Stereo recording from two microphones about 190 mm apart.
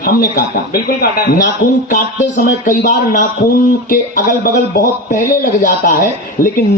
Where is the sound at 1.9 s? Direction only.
40° left (ahead or behind).